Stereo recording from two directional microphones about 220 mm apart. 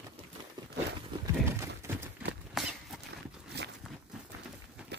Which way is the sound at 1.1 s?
20° right (ahead or behind).